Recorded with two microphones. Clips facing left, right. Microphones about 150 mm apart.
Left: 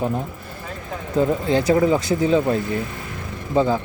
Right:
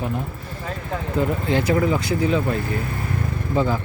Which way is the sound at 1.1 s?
35° left (ahead or behind).